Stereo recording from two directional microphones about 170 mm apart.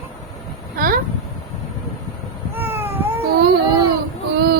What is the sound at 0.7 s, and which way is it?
Speech, 55° right (ahead or behind).